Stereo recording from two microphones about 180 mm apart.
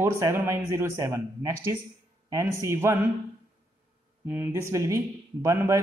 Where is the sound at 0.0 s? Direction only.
15° right (ahead or behind).